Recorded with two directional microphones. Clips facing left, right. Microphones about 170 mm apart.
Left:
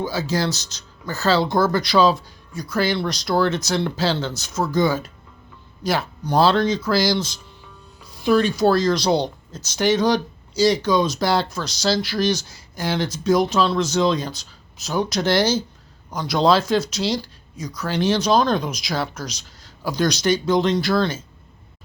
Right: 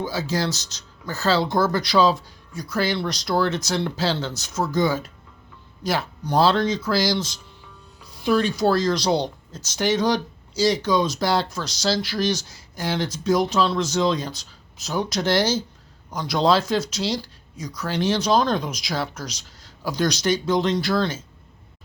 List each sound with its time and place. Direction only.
0.0 s speech: 70° left (ahead or behind)